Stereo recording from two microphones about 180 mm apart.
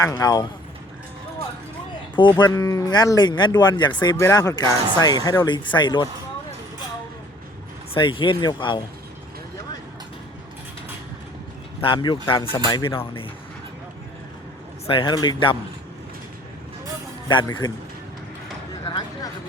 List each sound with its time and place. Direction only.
0.0 s speech: 20° left (ahead or behind)
2.4 s speech: 20° left (ahead or behind)
7.9 s speech: 30° left (ahead or behind)
11.8 s speech: 25° left (ahead or behind)
14.8 s speech: 30° left (ahead or behind)
17.2 s speech: 25° left (ahead or behind)
18.9 s vehicle: 20° left (ahead or behind)